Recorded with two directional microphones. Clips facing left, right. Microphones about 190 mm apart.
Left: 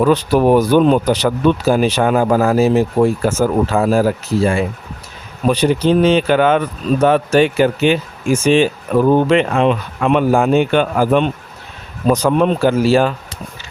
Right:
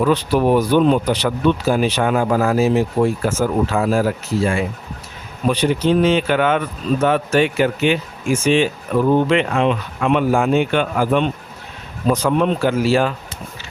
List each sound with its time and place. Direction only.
0.0 s speech: 45° left (ahead or behind)